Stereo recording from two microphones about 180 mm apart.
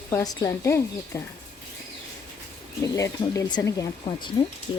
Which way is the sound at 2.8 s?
15° left (ahead or behind).